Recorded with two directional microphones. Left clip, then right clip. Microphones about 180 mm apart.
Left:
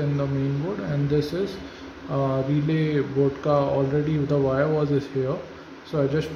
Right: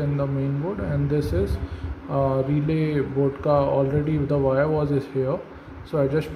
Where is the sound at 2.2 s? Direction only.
5° right (ahead or behind).